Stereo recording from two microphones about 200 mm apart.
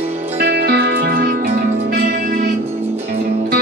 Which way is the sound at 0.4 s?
50° right (ahead or behind).